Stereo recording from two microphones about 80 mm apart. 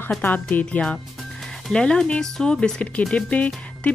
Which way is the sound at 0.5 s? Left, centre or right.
Centre.